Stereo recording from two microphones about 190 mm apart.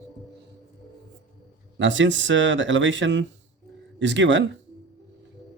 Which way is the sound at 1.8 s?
75° right (ahead or behind).